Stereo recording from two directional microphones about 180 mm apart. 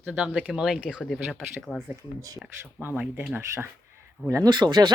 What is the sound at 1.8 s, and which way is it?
Speech, 15° right (ahead or behind).